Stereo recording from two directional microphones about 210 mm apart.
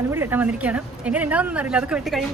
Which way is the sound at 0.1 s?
10° right (ahead or behind).